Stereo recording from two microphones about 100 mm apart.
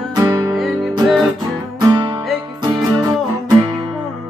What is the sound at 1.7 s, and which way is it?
Music, 40° right (ahead or behind).